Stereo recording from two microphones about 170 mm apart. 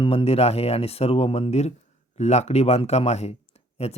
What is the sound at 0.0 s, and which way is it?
Speech, 30° left (ahead or behind).